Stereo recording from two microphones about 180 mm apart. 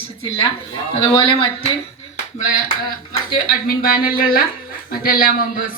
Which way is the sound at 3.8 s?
55° left (ahead or behind).